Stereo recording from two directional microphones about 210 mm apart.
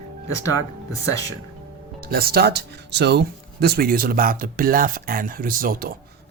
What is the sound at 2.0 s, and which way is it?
Speech, 45° right (ahead or behind).